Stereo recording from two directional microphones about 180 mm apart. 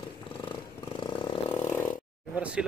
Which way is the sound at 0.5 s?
25° left (ahead or behind).